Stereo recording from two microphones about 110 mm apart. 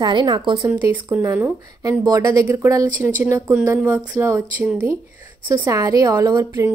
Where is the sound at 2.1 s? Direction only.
30° right (ahead or behind).